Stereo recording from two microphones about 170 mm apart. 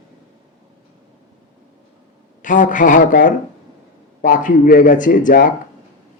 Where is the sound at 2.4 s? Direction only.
50° left (ahead or behind).